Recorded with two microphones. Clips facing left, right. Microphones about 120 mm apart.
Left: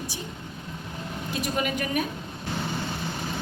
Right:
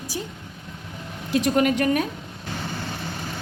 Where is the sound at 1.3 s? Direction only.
90° right; by 2.0 s 70° right (ahead or behind).